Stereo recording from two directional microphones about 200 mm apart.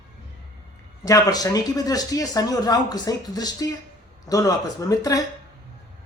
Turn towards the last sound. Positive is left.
turn(degrees=15)  # may be behind; listen again after turning